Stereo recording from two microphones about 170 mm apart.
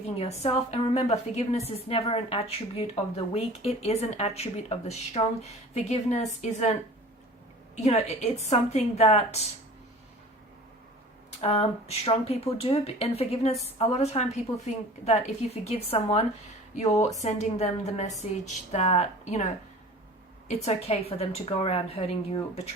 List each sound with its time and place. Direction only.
0.2 s a woman's voice: 40° left (ahead or behind)
7.8 s a woman's voice: 40° left (ahead or behind)
11.3 s a woman's voice: 35° left (ahead or behind)
20.5 s a woman's voice: 40° left (ahead or behind)